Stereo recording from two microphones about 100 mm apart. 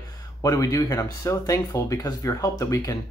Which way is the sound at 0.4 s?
35° left (ahead or behind).